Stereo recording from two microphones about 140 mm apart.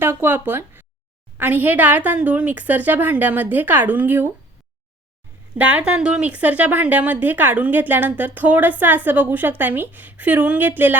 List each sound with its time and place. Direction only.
0.0 s a woman's voice: 15° right (ahead or behind)
5.5 s a woman's voice: 10° right (ahead or behind)